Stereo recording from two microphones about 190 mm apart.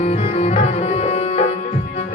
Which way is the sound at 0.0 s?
35° left (ahead or behind).